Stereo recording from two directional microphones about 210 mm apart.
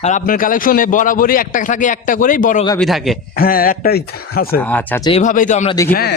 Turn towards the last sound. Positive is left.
turn(degrees=45)  # may be behind; listen again after turning